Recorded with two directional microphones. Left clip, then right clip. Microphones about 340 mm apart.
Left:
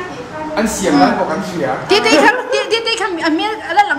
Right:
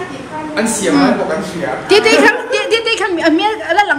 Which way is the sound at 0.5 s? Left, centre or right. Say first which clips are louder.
Right 1 dB; left.